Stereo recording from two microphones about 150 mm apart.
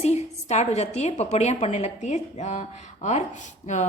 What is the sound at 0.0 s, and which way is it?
A woman's voice, 45° left (ahead or behind).